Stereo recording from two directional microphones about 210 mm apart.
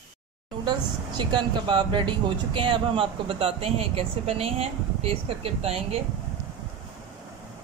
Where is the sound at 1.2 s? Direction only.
20° right (ahead or behind).